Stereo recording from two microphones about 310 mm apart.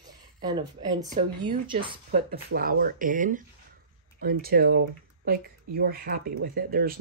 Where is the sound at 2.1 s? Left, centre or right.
Right.